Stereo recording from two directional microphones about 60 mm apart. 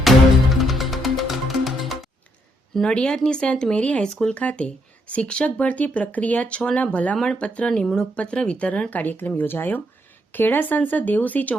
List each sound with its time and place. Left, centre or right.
0.6 s music: centre
2.9 s speech: centre